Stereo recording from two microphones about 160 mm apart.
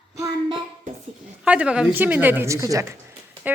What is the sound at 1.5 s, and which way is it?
Speech, 5° right (ahead or behind).